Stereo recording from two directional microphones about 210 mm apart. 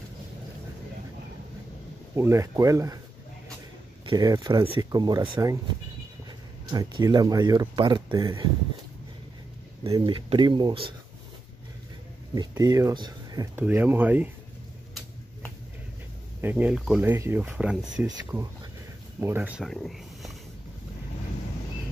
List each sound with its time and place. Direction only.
2.1 s speech: 15° right (ahead or behind)
4.0 s speech: 20° right (ahead or behind)
6.7 s speech: 20° right (ahead or behind)
9.8 s speech: 20° right (ahead or behind)
12.4 s speech: 20° right (ahead or behind)
16.3 s speech: 10° right (ahead or behind)
18.0 s speech: 15° right (ahead or behind); by 20.3 s centre (ahead or behind)